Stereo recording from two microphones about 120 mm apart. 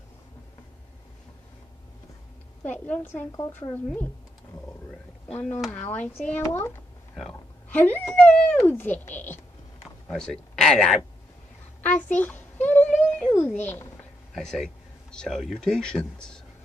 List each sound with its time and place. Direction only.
2.6 s speech: 15° left (ahead or behind)
3.3 s a woman's voice: 35° left (ahead or behind)
3.7 s speech: 15° left (ahead or behind)
5.3 s speech: 15° left (ahead or behind)
10.1 s speech: 5° left (ahead or behind)
11.8 s a sound: 15° left (ahead or behind)
13.5 s speech: 15° left (ahead or behind)
14.3 s speech: 5° left (ahead or behind)